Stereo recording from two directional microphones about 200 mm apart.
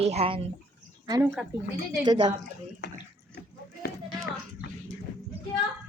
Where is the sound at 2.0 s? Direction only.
20° right (ahead or behind).